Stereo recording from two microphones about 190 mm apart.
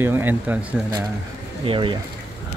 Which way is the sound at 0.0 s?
10° right (ahead or behind).